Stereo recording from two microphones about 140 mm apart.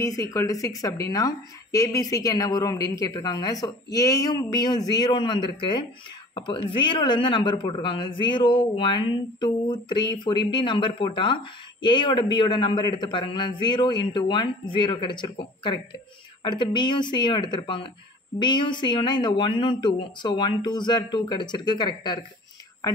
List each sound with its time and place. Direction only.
0.0 s a man's voice: 25° left (ahead or behind)